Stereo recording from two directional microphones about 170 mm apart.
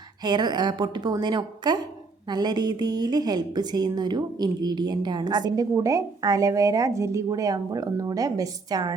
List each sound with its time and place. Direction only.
0.2 s a woman's voice: 25° right (ahead or behind)